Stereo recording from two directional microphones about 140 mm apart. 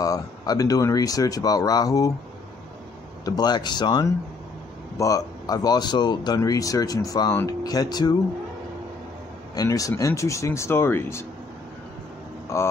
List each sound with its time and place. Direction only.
0.0 s speech: 25° left (ahead or behind)
3.3 s speech: 30° left (ahead or behind)
9.6 s speech: 25° left (ahead or behind)
12.5 s speech: 20° left (ahead or behind)